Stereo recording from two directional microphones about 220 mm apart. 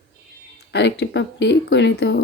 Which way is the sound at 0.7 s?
50° left (ahead or behind).